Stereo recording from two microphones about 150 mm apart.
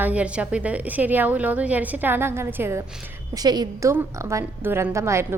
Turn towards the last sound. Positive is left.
turn(degrees=-20)  # may be behind; listen again after turning